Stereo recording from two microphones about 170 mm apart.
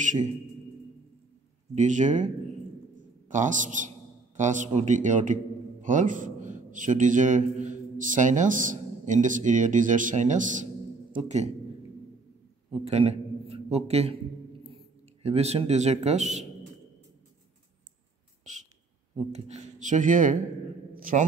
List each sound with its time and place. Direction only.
0.0 s a man's voice: 45° right (ahead or behind)
1.8 s a man's voice: 45° right (ahead or behind)
12.7 s a man's voice: 35° right (ahead or behind)
15.2 s speech: 35° right (ahead or behind)
18.4 s a sound: 45° right (ahead or behind)
19.1 s a man's voice: 40° right (ahead or behind)